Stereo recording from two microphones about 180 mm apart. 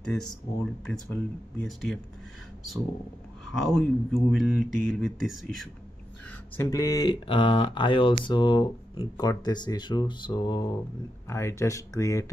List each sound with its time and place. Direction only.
0.0 s speech: 5° left (ahead or behind)
3.5 s speech: centre (ahead or behind)
6.5 s speech: 15° left (ahead or behind)